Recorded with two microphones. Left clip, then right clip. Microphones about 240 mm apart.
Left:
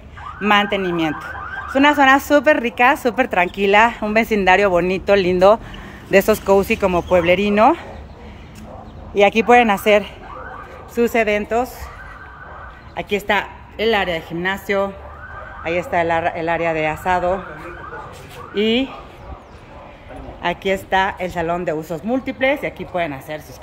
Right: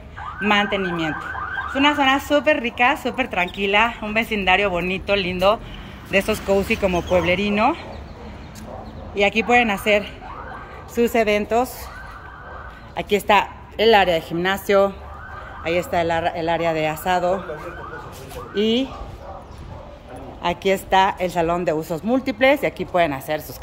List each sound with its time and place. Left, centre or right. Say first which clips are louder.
0.4 s speech: left 3 dB; centre
6.2 s speech: left 5 dB; centre
9.1 s speech: left 5 dB; centre
11.0 s a woman's voice: left 1 dB; centre
12.9 s a woman's voice: right 2 dB; centre
18.5 s speech: left 2 dB; centre
20.4 s a woman's voice: even; centre